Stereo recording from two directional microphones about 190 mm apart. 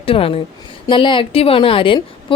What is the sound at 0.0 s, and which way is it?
A woman's voice, 30° left (ahead or behind).